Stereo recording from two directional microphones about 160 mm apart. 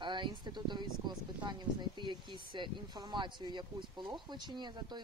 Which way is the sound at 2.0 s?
30° right (ahead or behind).